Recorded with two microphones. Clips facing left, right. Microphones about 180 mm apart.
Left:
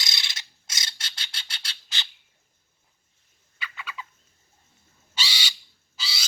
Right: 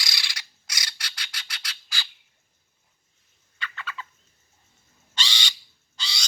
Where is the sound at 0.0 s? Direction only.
25° left (ahead or behind).